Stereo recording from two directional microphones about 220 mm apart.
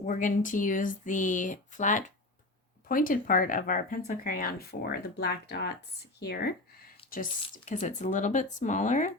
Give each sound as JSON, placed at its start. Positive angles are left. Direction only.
{"t": 0.0, "sound": "speech", "side_deg": 35}